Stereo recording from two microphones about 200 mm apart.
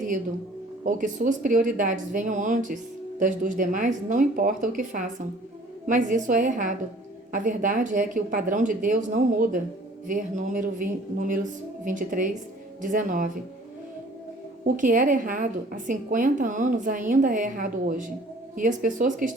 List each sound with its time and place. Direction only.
0.9 s a woman's voice: 40° right (ahead or behind)
11.9 s a woman's voice: 40° right (ahead or behind)
14.8 s a woman's voice: 40° right (ahead or behind)